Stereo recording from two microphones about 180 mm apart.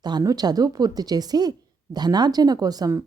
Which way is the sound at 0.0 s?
20° right (ahead or behind).